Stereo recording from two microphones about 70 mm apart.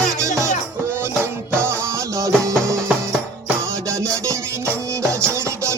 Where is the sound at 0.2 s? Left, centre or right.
Right.